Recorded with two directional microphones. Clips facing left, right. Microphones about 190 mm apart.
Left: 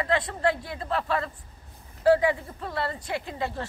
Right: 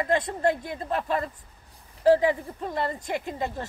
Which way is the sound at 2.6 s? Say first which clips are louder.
Right 2 dB; 15° right (ahead or behind).